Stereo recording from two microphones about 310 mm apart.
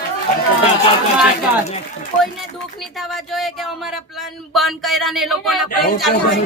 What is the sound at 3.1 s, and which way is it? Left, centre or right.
Speech, centre.